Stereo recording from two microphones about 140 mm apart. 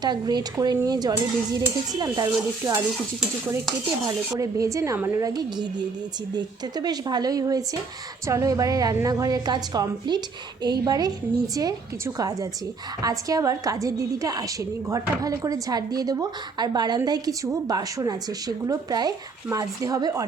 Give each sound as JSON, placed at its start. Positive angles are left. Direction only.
{"t": 0.0, "sound": "speech", "side_deg": -30}
{"t": 4.4, "sound": "a woman's voice", "side_deg": -25}
{"t": 5.2, "sound": "speech", "side_deg": -30}